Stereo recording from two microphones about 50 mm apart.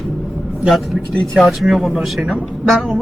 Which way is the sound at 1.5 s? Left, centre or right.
Centre.